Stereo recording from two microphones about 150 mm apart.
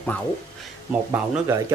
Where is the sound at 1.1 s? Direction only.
20° right (ahead or behind).